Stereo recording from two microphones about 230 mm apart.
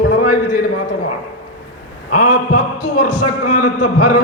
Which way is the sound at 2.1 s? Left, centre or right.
Left.